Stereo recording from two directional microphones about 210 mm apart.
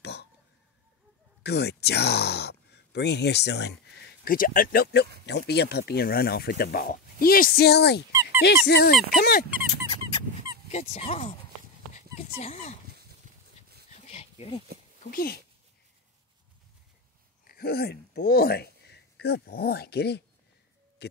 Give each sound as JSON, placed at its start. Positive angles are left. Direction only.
{"t": 0.0, "sound": "a sound", "side_deg": 50}
{"t": 1.4, "sound": "speech", "side_deg": 50}
{"t": 4.2, "sound": "speech", "side_deg": 45}
{"t": 8.1, "sound": "dog", "side_deg": -15}
{"t": 8.6, "sound": "speech", "side_deg": 50}
{"t": 9.7, "sound": "squeak", "side_deg": 25}
{"t": 10.7, "sound": "speech", "side_deg": 30}
{"t": 11.9, "sound": "dog", "side_deg": 30}
{"t": 13.2, "sound": "a sound", "side_deg": -35}
{"t": 14.0, "sound": "a sound", "side_deg": 30}
{"t": 15.0, "sound": "speech", "side_deg": 45}
{"t": 17.5, "sound": "speech", "side_deg": 45}